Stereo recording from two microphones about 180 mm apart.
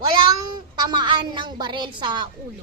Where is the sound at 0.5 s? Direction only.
25° right (ahead or behind).